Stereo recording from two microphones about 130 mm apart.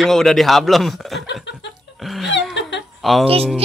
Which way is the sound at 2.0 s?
Centre (ahead or behind).